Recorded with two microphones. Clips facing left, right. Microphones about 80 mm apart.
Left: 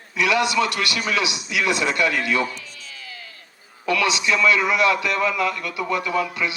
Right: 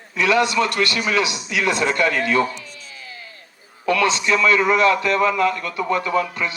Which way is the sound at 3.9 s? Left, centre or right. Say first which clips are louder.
Right 3 dB; right.